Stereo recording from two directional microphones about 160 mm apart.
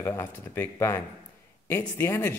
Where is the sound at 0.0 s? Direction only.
15° left (ahead or behind).